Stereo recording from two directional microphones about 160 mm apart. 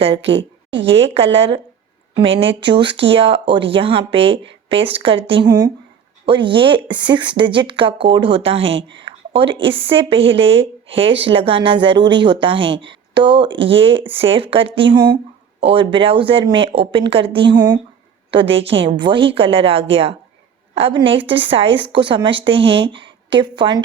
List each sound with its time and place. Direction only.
0.9 s a woman's voice: 35° right (ahead or behind)